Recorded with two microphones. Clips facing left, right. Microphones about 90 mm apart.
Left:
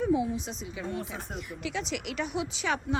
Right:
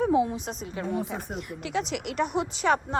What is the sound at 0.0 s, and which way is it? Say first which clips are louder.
Speech: right 4 dB; 70° right (ahead or behind).